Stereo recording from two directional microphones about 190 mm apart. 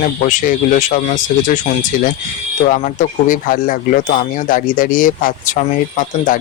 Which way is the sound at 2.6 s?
45° left (ahead or behind).